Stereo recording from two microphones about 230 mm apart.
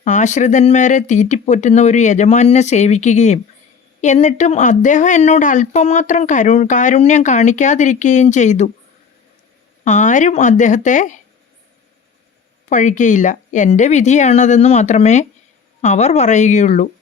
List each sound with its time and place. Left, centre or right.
0.0 s speech: left
9.8 s speech: left
12.6 s speech: left